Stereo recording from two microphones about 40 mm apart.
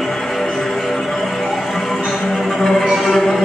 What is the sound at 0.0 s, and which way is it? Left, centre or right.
Music, centre.